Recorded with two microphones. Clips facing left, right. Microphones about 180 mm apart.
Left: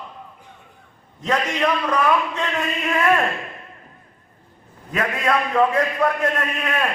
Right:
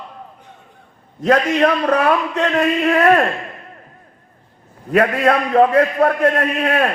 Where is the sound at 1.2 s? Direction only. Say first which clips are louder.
Right 7 dB; 55° right (ahead or behind).